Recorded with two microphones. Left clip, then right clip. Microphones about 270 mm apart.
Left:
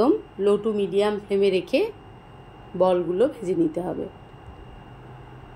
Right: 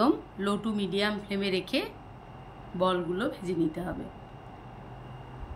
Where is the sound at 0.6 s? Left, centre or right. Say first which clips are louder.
Left 8 dB; centre.